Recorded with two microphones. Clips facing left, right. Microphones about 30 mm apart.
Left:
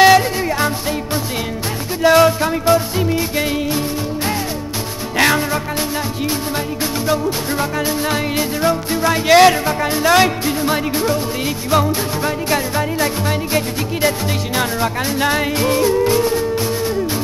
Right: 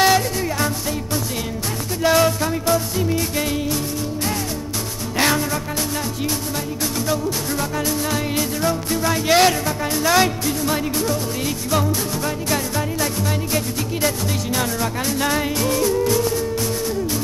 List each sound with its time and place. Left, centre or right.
0.0 s music: left
2.0 s music: left
5.1 s music: left
7.1 s music: left
12.4 s music: left